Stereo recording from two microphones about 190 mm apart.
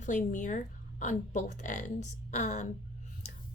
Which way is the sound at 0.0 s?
40° left (ahead or behind).